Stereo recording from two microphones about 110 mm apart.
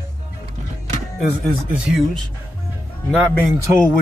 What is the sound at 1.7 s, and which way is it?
Speech, 10° right (ahead or behind).